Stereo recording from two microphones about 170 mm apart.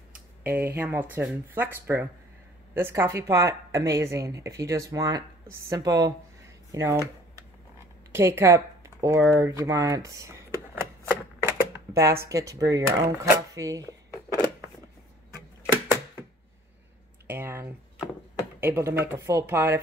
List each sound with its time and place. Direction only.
0.4 s speech: 10° right (ahead or behind)
8.1 s typing: 15° right (ahead or behind)
12.3 s speech: 20° right (ahead or behind)
17.3 s a sound: 15° right (ahead or behind)
18.6 s speech: 15° right (ahead or behind)